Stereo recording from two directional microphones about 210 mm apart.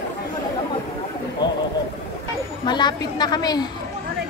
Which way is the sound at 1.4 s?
20° left (ahead or behind).